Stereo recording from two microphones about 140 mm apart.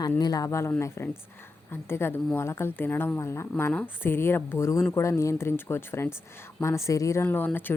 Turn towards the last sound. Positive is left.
turn(degrees=15)  # may be behind; listen again after turning